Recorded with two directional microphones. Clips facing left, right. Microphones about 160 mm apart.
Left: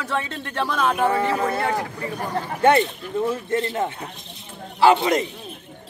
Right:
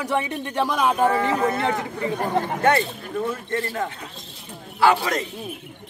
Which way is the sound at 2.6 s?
25° left (ahead or behind).